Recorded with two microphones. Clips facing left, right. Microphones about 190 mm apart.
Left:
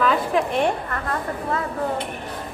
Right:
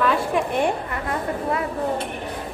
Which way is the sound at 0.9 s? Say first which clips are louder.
Right 1 dB; 15° right (ahead or behind).